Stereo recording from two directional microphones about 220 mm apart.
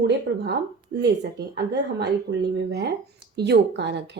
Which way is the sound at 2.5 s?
50° right (ahead or behind).